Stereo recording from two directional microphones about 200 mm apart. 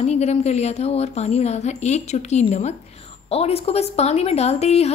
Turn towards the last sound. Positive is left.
turn(degrees=30)  # may be behind; listen again after turning